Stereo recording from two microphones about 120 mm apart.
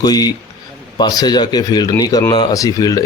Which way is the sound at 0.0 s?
35° left (ahead or behind).